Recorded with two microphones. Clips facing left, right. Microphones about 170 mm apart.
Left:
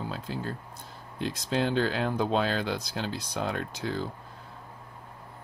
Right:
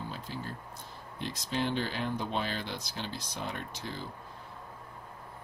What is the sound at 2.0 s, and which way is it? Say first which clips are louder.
Speech: left 7 dB; 90° left.